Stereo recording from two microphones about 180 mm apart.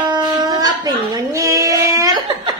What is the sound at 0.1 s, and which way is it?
Child singing, 20° right (ahead or behind).